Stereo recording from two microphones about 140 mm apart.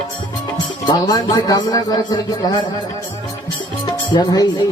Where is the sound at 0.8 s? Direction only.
30° left (ahead or behind).